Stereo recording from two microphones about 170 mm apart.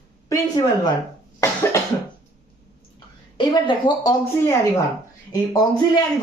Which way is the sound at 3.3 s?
30° left (ahead or behind).